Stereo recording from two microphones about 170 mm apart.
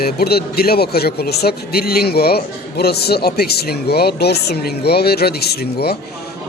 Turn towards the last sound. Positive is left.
turn(degrees=70)  # may be behind; listen again after turning